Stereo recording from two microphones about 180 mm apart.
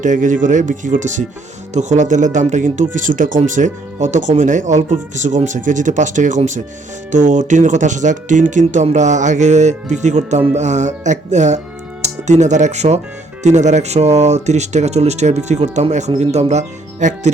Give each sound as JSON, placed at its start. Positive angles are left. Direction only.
{"t": 0.0, "sound": "speech", "side_deg": -45}